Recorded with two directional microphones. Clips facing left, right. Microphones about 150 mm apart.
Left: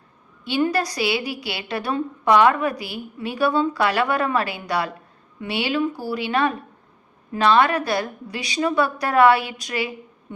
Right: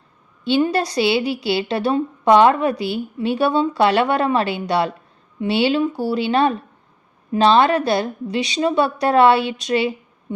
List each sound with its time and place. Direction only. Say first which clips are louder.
0.4 s a woman's voice: right 4 dB; 25° right (ahead or behind)